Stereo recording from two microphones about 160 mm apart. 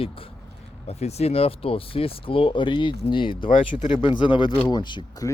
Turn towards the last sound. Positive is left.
turn(degrees=25)  # may be behind; listen again after turning